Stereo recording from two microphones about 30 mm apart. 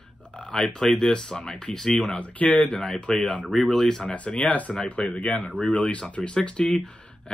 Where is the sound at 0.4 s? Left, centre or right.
Left.